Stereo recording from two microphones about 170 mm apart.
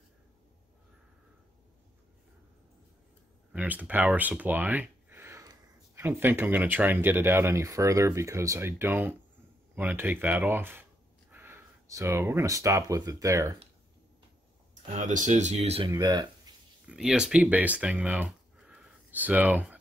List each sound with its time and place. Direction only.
3.5 s speech: 10° right (ahead or behind)
14.7 s speech: 45° right (ahead or behind)
15.9 s speech: 25° right (ahead or behind)
16.5 s a sound: 25° right (ahead or behind)
16.8 s speech: 5° right (ahead or behind)